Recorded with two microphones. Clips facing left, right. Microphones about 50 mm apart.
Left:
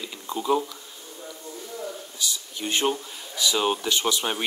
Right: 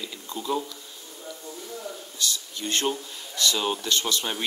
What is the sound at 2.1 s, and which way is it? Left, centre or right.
Speech, centre.